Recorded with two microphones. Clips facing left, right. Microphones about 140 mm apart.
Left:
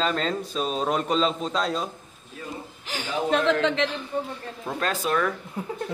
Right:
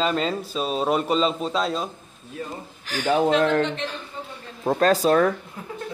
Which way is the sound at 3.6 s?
90° left.